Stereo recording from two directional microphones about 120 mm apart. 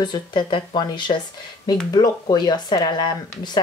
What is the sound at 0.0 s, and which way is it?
Speech, 40° left (ahead or behind).